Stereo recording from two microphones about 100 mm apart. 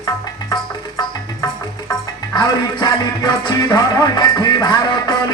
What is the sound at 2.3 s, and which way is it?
Music, 45° left (ahead or behind).